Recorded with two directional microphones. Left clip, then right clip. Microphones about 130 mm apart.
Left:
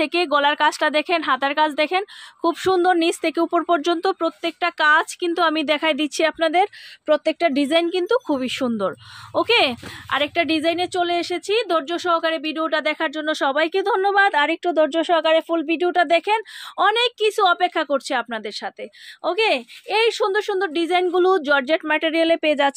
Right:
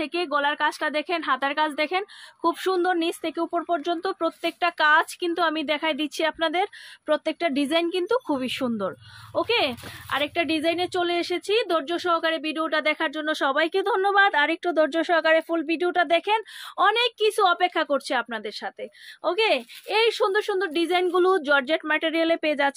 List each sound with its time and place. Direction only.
0.0 s a woman's voice: 50° left (ahead or behind)
4.1 s speech: 35° left (ahead or behind)
9.3 s speech: 40° left (ahead or behind)